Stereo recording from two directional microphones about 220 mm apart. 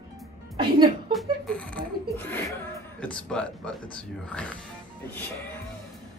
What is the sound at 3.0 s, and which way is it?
Speech, 5° left (ahead or behind).